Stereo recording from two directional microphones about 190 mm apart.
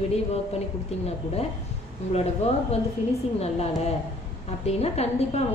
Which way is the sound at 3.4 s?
35° left (ahead or behind).